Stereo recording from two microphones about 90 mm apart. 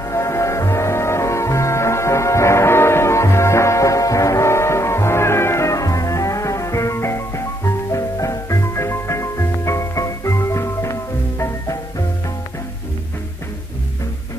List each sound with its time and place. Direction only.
0.1 s music: 35° left (ahead or behind)